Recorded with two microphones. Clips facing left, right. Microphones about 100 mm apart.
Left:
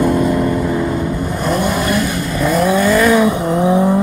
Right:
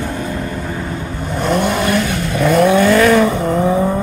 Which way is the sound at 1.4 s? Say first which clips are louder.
Right 3 dB; 5° left (ahead or behind).